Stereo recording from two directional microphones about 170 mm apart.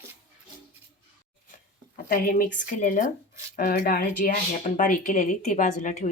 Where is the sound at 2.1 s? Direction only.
50° left (ahead or behind).